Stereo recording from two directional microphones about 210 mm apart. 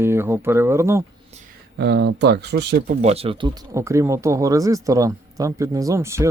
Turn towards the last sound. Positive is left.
turn(degrees=-15)  # may be behind; listen again after turning